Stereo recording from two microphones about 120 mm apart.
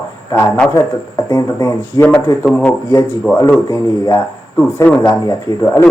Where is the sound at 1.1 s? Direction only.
30° left (ahead or behind).